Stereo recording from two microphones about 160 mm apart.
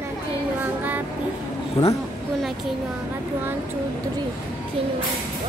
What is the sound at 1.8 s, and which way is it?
Speech, 35° left (ahead or behind).